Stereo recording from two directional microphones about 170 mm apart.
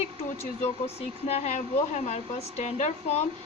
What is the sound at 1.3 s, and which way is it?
A woman's voice, 40° left (ahead or behind).